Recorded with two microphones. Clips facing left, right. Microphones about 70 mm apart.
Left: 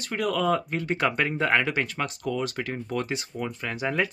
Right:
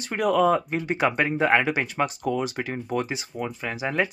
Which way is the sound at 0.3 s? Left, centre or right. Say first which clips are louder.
Right 5 dB; centre.